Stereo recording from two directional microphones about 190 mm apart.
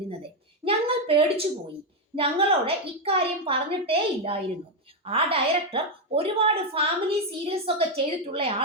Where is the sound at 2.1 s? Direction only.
30° right (ahead or behind).